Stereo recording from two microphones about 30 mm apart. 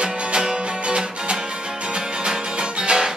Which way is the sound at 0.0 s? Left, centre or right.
Right.